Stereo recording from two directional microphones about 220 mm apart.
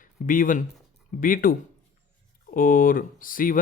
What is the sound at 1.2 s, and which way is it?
Speech, 40° left (ahead or behind).